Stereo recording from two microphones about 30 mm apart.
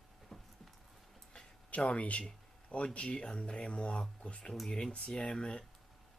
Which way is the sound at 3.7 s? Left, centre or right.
Left.